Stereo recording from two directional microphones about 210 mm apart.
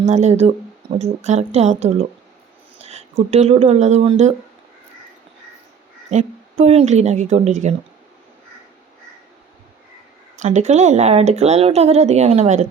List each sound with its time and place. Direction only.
0.0 s speech: 30° right (ahead or behind)
6.1 s speech: 30° right (ahead or behind)
10.3 s speech: 35° right (ahead or behind)